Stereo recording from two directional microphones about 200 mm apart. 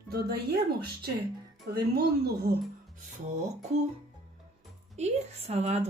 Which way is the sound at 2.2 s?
50° right (ahead or behind).